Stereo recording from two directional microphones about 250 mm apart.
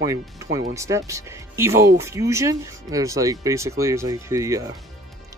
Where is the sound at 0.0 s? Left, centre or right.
Centre.